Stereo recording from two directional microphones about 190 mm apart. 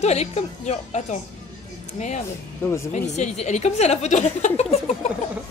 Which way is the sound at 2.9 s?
40° left (ahead or behind).